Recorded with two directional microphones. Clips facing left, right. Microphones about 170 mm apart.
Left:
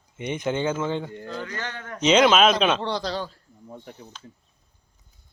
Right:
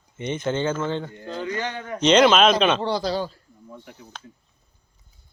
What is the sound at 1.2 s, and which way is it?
Speech, 20° right (ahead or behind).